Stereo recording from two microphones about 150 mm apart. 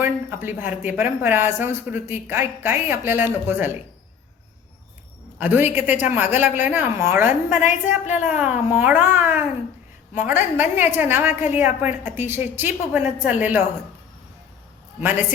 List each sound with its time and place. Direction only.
0.0 s speech: 15° right (ahead or behind)
5.4 s speech: 10° right (ahead or behind)